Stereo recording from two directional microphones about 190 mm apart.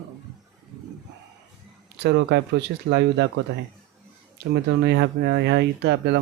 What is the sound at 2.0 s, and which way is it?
Speech, 60° right (ahead or behind).